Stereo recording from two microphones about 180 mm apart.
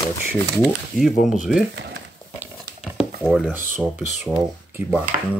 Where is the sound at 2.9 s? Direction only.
Centre (ahead or behind).